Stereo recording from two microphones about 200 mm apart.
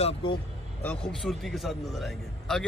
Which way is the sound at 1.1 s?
Centre (ahead or behind).